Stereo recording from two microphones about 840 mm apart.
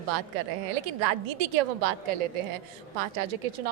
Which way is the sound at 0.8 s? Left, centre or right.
Right.